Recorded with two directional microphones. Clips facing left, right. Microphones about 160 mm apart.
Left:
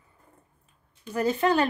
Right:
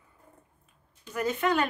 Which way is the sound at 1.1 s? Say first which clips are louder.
Left 4 dB; 35° left (ahead or behind).